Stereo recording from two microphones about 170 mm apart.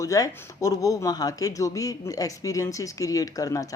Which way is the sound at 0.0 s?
20° left (ahead or behind).